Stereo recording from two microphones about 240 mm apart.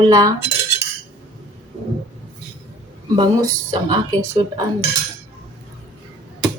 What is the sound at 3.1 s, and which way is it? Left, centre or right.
Speech, centre.